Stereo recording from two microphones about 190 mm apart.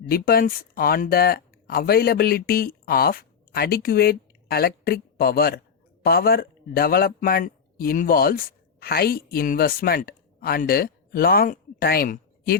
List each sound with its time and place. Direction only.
0.1 s a man's voice: 50° left (ahead or behind)